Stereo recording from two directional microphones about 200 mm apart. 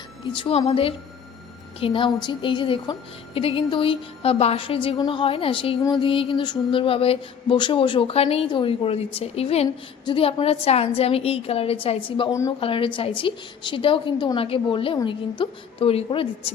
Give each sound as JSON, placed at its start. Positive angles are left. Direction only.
{"t": 0.3, "sound": "a woman's voice", "side_deg": 30}
{"t": 12.5, "sound": "a woman's voice", "side_deg": 25}